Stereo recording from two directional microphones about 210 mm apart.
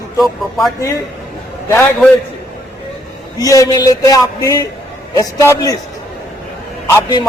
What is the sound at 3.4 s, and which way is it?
A man's voice, 15° left (ahead or behind).